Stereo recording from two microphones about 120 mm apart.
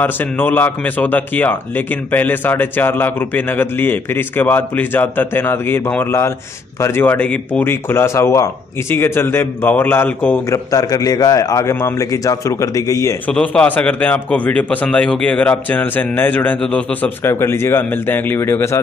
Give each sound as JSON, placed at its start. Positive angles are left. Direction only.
{"t": 0.0, "sound": "a man's voice", "side_deg": 15}
{"t": 10.5, "sound": "a man's voice", "side_deg": 30}
{"t": 13.3, "sound": "a man's voice", "side_deg": 10}